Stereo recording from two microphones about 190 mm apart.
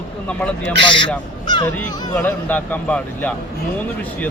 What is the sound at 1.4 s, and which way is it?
Honk, 25° left (ahead or behind).